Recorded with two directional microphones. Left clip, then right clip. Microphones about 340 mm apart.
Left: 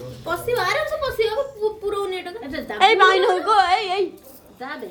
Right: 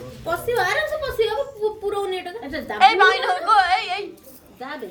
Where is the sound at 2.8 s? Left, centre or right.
Centre.